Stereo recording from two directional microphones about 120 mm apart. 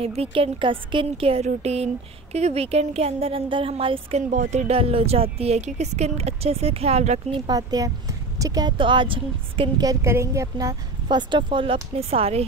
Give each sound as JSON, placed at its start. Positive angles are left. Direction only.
{"t": 0.0, "sound": "a woman's voice", "side_deg": -55}
{"t": 4.3, "sound": "speech", "side_deg": -80}
{"t": 4.7, "sound": "a woman's voice", "side_deg": -55}
{"t": 7.4, "sound": "a woman's voice", "side_deg": -30}
{"t": 9.8, "sound": "a woman's voice", "side_deg": -25}